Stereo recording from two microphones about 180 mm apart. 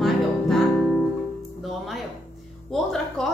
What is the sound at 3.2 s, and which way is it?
Speech, centre (ahead or behind).